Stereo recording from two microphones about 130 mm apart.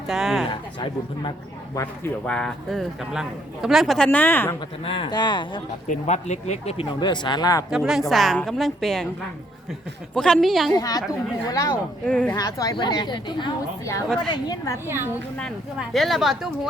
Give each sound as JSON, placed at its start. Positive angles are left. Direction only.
{"t": 0.1, "sound": "a man's voice", "side_deg": 0}
{"t": 0.5, "sound": "a woman's voice", "side_deg": 35}
{"t": 2.2, "sound": "a man's voice", "side_deg": 5}
{"t": 4.9, "sound": "a woman's voice", "side_deg": 40}
{"t": 5.9, "sound": "speech", "side_deg": 60}
{"t": 7.0, "sound": "a woman's voice", "side_deg": 35}
{"t": 7.7, "sound": "a man's voice", "side_deg": -5}
{"t": 10.2, "sound": "a man's voice", "side_deg": 5}
{"t": 10.8, "sound": "a woman's voice", "side_deg": 30}
{"t": 12.0, "sound": "speech", "side_deg": 10}
{"t": 12.4, "sound": "a woman's voice", "side_deg": 30}
{"t": 14.8, "sound": "a woman's voice", "side_deg": -20}
{"t": 15.8, "sound": "a man's voice", "side_deg": 0}